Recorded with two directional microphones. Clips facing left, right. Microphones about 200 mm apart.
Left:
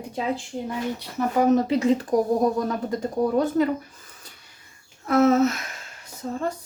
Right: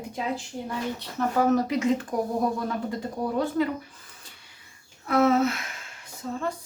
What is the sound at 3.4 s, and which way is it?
Speech, 45° left (ahead or behind).